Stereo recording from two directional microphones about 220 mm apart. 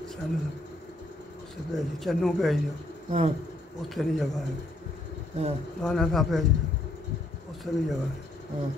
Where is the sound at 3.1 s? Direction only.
30° right (ahead or behind).